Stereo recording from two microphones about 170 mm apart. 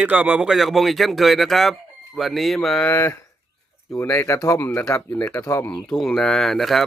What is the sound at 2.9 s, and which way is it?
Speech, 15° left (ahead or behind).